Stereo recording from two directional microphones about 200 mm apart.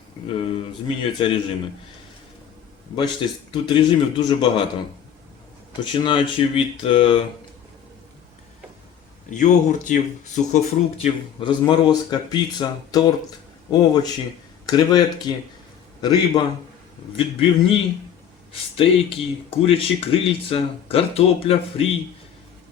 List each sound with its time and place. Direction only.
0.3 s speech: 25° left (ahead or behind)
3.5 s speech: 25° left (ahead or behind)
9.3 s speech: 40° left (ahead or behind)